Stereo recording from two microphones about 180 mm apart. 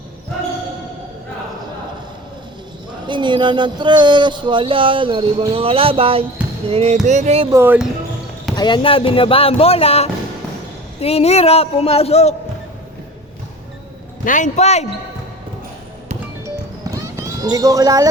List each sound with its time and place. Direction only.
3.1 s speech: 25° right (ahead or behind)
6.7 s music: 35° right (ahead or behind)
7.5 s speech: 10° right (ahead or behind)
8.5 s speech: 25° left (ahead or behind)
14.3 s speech: 45° left (ahead or behind)
16.9 s clip-clop: 15° right (ahead or behind)